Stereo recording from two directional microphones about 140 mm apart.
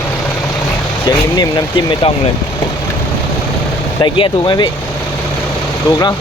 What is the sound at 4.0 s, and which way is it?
Speech, 35° left (ahead or behind).